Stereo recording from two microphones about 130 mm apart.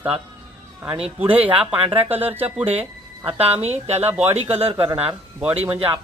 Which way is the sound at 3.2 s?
50° right (ahead or behind).